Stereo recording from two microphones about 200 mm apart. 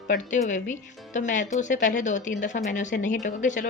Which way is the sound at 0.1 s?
40° left (ahead or behind).